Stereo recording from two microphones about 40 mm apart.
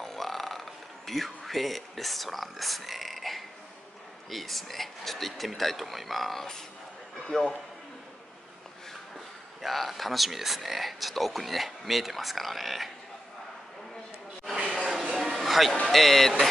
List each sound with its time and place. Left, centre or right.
0.0 s a sound: centre
4.3 s speech: centre
7.3 s a man's voice: centre
9.1 s speech: centre
14.7 s a sound: centre
15.1 s music: centre
15.9 s speech: centre